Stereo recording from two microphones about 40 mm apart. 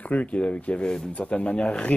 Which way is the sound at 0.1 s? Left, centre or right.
Left.